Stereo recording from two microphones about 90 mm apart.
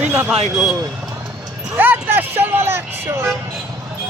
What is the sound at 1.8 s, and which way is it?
Speech, 20° right (ahead or behind).